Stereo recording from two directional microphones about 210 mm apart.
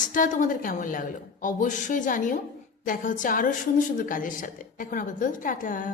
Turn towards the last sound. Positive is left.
turn(degrees=40)  # may be behind; listen again after turning